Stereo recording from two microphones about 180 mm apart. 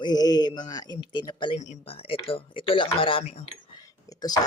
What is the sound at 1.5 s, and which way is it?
Speech, 40° left (ahead or behind).